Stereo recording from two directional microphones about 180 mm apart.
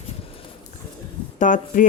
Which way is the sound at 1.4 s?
45° left (ahead or behind).